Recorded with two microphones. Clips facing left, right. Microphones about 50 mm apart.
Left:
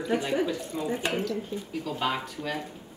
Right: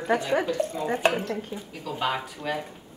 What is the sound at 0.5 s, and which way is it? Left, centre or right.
Speech, right.